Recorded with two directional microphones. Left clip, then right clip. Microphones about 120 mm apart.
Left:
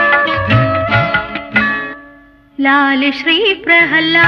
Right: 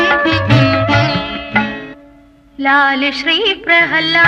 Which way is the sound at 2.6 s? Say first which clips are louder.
Even; 35° left (ahead or behind).